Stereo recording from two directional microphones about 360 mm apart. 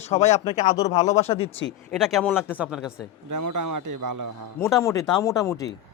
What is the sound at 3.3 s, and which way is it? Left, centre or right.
Speech, right.